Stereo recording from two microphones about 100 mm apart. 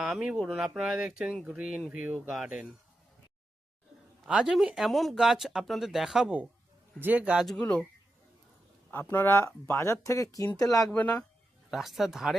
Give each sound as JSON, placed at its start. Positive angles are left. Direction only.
{"t": 0.0, "sound": "speech", "side_deg": -10}
{"t": 4.3, "sound": "speech", "side_deg": -10}
{"t": 7.0, "sound": "speech", "side_deg": -15}
{"t": 7.3, "sound": "speech", "side_deg": 0}
{"t": 7.6, "sound": "speech", "side_deg": 10}
{"t": 8.9, "sound": "speech", "side_deg": 20}
{"t": 10.8, "sound": "speech", "side_deg": 15}
{"t": 11.7, "sound": "speech", "side_deg": 0}